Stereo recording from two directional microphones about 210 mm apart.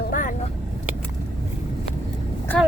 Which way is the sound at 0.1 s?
40° left (ahead or behind).